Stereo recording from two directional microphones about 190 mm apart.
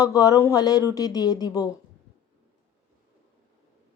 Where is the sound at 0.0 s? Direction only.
20° left (ahead or behind).